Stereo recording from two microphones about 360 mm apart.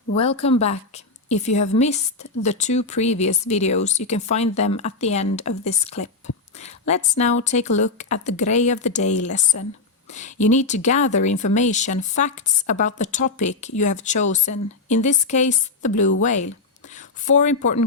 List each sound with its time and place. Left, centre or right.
0.2 s speech: centre